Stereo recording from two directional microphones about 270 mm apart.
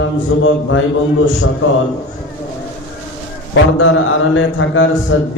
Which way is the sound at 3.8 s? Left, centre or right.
Left.